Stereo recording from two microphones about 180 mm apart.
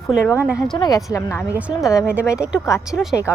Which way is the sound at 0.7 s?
20° left (ahead or behind).